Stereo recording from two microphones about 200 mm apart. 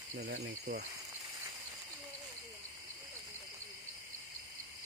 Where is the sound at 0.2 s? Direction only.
50° right (ahead or behind).